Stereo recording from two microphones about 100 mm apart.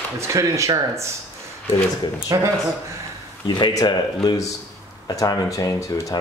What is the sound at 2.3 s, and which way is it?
Speech, 35° right (ahead or behind).